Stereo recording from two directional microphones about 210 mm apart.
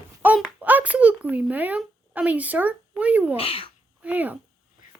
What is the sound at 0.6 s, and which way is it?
Speech, 10° right (ahead or behind).